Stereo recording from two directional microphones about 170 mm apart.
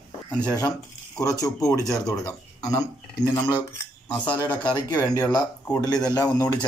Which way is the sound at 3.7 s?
10° left (ahead or behind).